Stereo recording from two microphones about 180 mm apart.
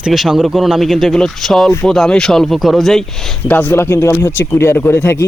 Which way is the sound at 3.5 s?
10° left (ahead or behind).